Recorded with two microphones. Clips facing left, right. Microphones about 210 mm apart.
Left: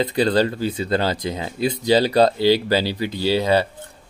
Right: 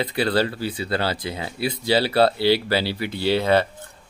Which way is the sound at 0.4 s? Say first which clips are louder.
Left 3 dB; 45° left (ahead or behind).